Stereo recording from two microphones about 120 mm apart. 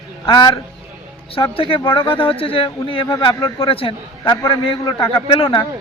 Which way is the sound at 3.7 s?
50° left (ahead or behind).